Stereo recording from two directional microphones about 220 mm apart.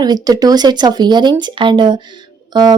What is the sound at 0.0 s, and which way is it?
Speech, 15° right (ahead or behind).